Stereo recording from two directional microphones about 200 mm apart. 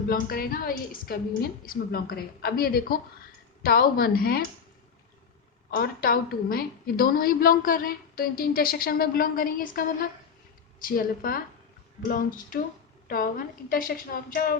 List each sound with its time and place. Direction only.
0.1 s a woman's voice: 45° left (ahead or behind)
5.7 s a woman's voice: 50° left (ahead or behind)